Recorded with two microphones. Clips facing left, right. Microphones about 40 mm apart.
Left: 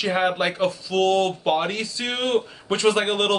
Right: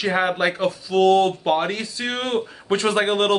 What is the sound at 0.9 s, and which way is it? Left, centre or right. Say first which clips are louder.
Speech: right 5 dB; right.